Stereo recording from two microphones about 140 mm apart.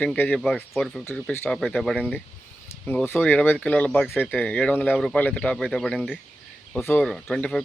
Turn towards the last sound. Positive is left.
turn(degrees=5)  # may be behind; listen again after turning